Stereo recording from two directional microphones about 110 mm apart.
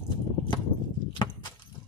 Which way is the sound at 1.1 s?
45° left (ahead or behind).